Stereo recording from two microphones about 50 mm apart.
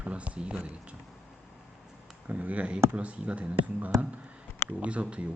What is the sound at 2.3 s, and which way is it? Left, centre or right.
Speech, right.